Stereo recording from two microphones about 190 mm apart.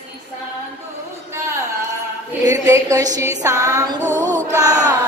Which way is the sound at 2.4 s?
15° right (ahead or behind).